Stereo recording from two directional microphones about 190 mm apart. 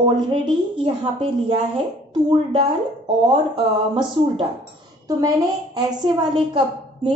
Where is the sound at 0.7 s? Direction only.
25° right (ahead or behind).